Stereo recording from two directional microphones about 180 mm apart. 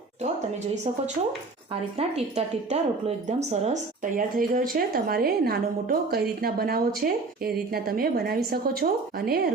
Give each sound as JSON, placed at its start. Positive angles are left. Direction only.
{"t": 2.0, "sound": "a woman's voice", "side_deg": -35}